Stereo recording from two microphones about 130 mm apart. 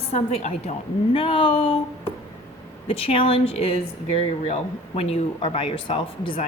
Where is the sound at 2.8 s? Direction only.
45° left (ahead or behind).